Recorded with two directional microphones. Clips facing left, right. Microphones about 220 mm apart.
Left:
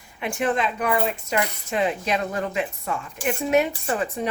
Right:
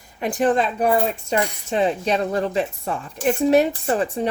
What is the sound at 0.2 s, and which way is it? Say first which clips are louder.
Speech: right 5 dB; 35° right (ahead or behind).